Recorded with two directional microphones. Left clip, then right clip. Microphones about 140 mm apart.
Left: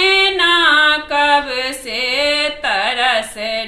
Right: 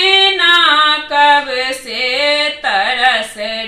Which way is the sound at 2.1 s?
50° left (ahead or behind).